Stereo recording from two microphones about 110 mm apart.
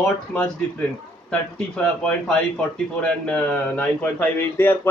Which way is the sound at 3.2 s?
15° left (ahead or behind).